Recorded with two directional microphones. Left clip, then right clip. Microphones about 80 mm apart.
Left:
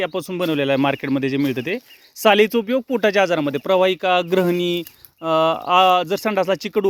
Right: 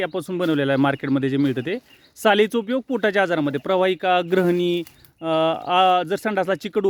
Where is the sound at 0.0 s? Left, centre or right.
Right.